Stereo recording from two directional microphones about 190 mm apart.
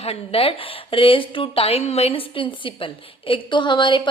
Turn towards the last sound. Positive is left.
turn(degrees=25)  # may be behind; listen again after turning